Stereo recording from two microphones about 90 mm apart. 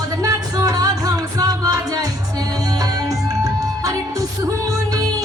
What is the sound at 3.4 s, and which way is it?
Music, 40° right (ahead or behind).